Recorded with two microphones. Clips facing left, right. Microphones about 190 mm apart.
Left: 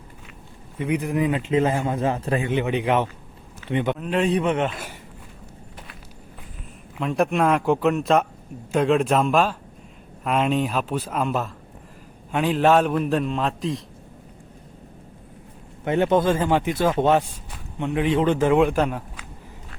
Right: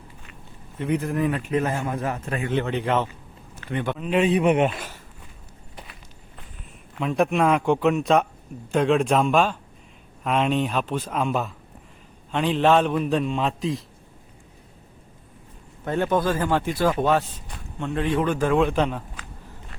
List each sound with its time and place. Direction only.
0.8 s speech: 10° left (ahead or behind); by 2.5 s 30° left (ahead or behind)
2.5 s speech: 15° left (ahead or behind)
3.9 s speech: centre (ahead or behind)
4.4 s speech: 15° right (ahead or behind)
6.9 s speech: centre (ahead or behind)
15.8 s speech: 20° left (ahead or behind)
18.7 s a man's voice: 5° left (ahead or behind)